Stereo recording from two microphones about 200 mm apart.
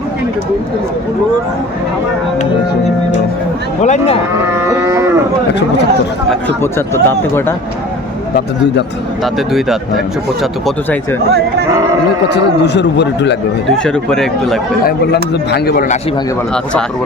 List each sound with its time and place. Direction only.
3.8 s speech: 35° left (ahead or behind)
4.5 s cattle: 15° right (ahead or behind)
6.6 s speech: 10° left (ahead or behind)
9.2 s speech: centre (ahead or behind)
12.3 s a man's voice: 60° left (ahead or behind)
13.7 s speech: 5° left (ahead or behind)
14.8 s a man's voice: 55° left (ahead or behind)